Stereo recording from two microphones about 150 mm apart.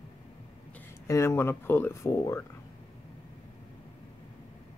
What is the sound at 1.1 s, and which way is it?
Speech, 20° left (ahead or behind).